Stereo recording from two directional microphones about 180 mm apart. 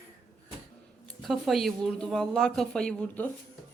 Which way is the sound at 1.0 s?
Centre (ahead or behind).